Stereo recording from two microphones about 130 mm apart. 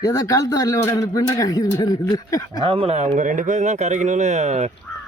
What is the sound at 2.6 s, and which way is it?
Speech, 45° right (ahead or behind).